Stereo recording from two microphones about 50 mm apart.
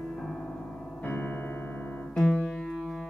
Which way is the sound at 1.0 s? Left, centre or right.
Left.